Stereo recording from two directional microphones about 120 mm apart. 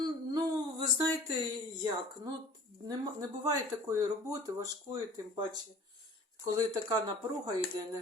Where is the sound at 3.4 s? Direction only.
30° right (ahead or behind).